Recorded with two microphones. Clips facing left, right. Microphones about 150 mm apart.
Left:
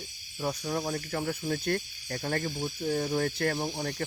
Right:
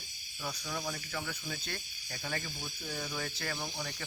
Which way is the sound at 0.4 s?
40° left (ahead or behind).